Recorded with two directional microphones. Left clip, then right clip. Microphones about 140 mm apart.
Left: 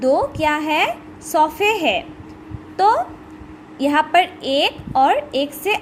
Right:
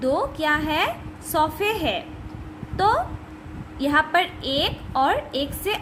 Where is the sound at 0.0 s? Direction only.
20° left (ahead or behind).